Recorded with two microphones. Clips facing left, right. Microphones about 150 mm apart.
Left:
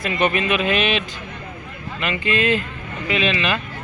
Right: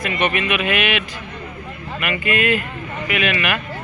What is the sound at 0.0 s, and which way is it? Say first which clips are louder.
Speech: left 1 dB; 30° left (ahead or behind).